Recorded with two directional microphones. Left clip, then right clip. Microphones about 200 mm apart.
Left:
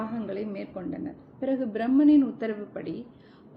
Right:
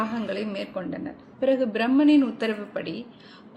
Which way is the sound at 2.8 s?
5° right (ahead or behind).